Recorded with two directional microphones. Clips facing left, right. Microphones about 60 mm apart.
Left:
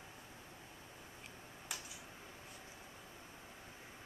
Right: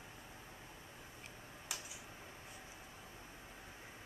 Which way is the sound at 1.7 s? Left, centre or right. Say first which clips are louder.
Even; centre.